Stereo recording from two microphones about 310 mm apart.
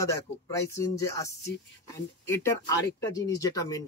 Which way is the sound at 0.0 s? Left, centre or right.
Centre.